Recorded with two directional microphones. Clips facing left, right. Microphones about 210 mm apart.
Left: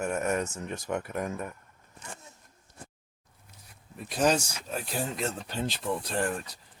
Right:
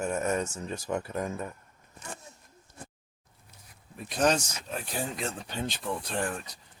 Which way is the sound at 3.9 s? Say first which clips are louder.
Even; 5° left (ahead or behind).